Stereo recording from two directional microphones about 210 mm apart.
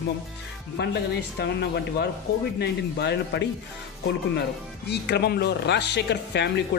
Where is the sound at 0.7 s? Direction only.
55° left (ahead or behind).